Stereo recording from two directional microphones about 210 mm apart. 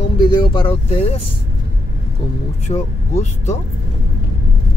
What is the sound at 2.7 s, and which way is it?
Speech, 30° left (ahead or behind).